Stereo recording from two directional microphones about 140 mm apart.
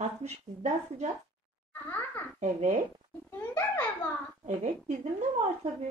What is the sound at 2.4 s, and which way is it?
Speech, 55° right (ahead or behind).